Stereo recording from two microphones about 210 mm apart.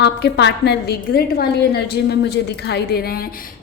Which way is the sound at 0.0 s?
55° left (ahead or behind).